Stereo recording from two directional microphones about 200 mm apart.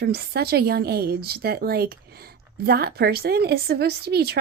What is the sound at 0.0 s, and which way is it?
Speech, 55° right (ahead or behind).